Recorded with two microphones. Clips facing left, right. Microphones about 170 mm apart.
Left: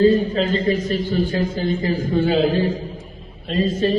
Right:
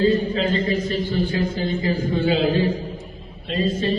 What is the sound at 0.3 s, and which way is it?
A man's voice, 45° left (ahead or behind).